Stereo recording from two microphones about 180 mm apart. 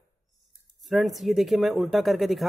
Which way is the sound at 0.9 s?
Centre (ahead or behind).